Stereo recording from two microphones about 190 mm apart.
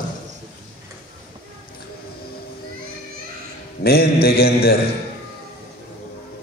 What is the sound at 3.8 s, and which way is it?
Mantra, 55° left (ahead or behind).